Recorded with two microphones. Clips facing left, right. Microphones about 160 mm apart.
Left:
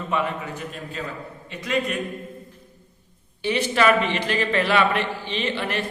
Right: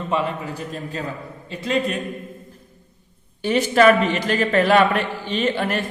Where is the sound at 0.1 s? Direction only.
30° right (ahead or behind).